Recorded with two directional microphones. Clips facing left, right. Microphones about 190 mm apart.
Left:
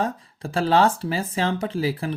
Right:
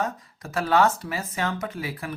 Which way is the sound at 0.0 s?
30° left (ahead or behind).